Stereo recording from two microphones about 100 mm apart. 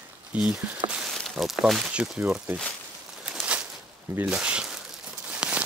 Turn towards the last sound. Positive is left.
turn(degrees=-15)  # may be behind; listen again after turning